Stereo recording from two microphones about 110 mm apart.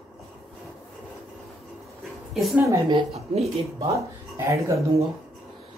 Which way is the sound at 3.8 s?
25° right (ahead or behind).